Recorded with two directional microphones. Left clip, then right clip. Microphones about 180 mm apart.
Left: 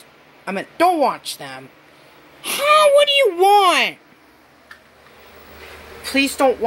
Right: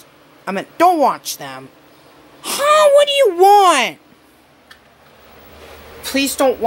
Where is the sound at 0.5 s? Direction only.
10° right (ahead or behind).